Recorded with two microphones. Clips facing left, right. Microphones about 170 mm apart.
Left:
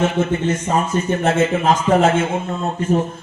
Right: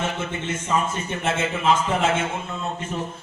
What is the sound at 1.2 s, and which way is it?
A man's voice, 40° left (ahead or behind).